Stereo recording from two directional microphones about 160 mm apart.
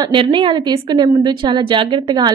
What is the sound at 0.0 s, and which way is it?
A woman's voice, 30° right (ahead or behind).